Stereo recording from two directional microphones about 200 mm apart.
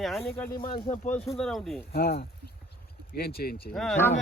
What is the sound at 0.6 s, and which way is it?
Speech, 30° left (ahead or behind).